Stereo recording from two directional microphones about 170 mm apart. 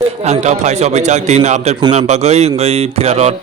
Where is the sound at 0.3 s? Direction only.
40° right (ahead or behind).